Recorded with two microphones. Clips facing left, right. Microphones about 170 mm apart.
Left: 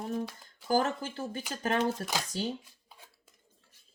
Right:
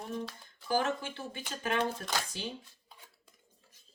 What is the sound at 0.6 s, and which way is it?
Speech, 40° left (ahead or behind).